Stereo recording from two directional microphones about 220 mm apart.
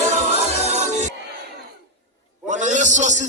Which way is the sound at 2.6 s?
35° right (ahead or behind).